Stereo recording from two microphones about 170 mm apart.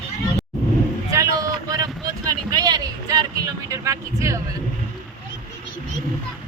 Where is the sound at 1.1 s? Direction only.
20° right (ahead or behind).